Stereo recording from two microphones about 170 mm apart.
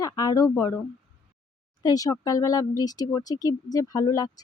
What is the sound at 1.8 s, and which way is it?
Speech, 20° left (ahead or behind).